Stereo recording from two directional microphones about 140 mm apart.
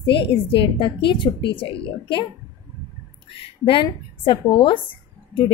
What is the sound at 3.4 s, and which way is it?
A woman's voice, 40° left (ahead or behind).